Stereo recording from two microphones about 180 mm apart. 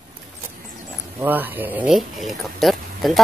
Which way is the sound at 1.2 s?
10° right (ahead or behind).